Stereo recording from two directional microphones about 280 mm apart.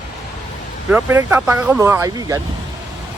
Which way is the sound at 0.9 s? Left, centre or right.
Centre.